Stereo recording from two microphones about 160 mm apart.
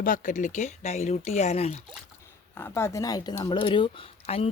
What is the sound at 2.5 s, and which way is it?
Speech, 15° left (ahead or behind).